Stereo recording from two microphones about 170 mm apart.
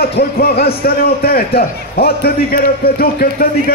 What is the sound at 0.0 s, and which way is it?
A man's voice, 65° left (ahead or behind).